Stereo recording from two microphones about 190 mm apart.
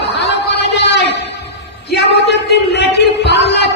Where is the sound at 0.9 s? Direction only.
60° left (ahead or behind).